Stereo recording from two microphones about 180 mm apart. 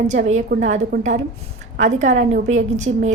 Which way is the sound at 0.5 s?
55° right (ahead or behind).